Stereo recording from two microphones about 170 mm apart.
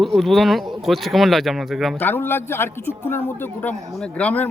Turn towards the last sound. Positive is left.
turn(degrees=10)  # may be behind; listen again after turning